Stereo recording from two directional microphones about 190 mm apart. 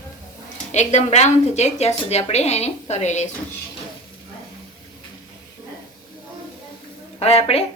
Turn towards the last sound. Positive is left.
turn(degrees=30)  # may be behind; listen again after turning